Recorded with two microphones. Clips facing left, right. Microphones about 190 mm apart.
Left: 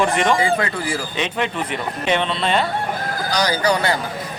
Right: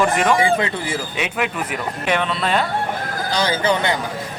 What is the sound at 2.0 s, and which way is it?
Speech, 25° left (ahead or behind).